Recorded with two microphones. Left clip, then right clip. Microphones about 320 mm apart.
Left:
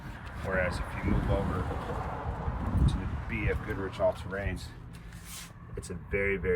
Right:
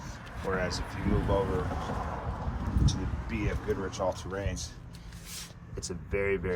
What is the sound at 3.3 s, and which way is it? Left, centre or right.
Speech, centre.